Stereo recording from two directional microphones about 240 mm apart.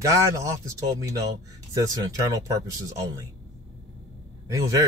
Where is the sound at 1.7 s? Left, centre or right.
Centre.